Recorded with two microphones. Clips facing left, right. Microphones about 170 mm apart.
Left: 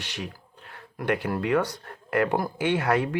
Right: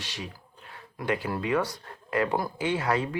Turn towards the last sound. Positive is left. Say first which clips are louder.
# left 3 dB
turn(degrees=65)  # may be behind; listen again after turning